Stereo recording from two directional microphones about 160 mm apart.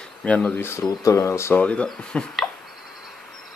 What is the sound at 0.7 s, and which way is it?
Speech, 15° left (ahead or behind).